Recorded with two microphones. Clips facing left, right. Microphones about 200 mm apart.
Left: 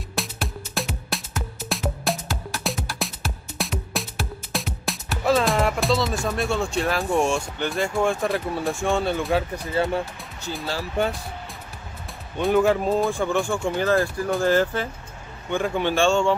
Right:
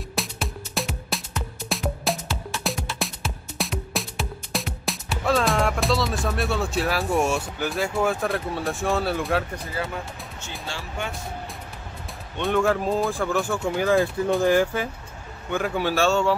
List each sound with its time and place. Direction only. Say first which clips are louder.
0.1 s music: left 1 dB; centre (ahead or behind)
9.8 s speech: left 8 dB; 30° left (ahead or behind)
12.4 s a man's voice: left 3 dB; centre (ahead or behind)